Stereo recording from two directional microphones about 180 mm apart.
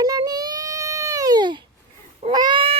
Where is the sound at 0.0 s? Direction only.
20° right (ahead or behind).